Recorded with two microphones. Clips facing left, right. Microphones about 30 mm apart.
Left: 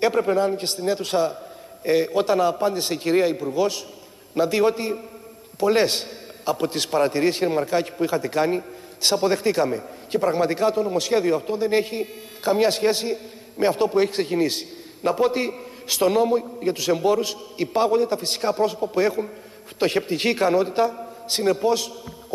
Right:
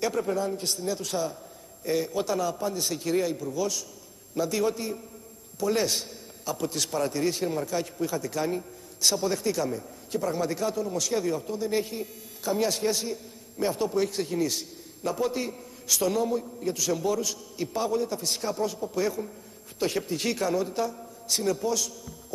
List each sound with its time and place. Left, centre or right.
0.0 s a man's voice: left